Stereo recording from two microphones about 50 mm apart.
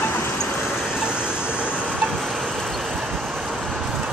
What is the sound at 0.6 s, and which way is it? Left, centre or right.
Vehicle, centre.